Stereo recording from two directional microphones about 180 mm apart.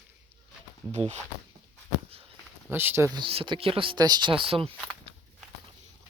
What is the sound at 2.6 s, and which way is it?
Speech, 10° right (ahead or behind).